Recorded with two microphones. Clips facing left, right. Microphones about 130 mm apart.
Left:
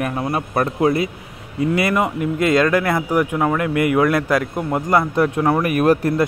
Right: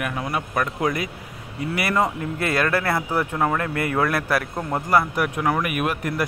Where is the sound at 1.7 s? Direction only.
20° left (ahead or behind).